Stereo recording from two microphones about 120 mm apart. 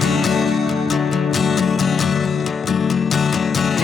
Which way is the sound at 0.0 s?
Centre (ahead or behind).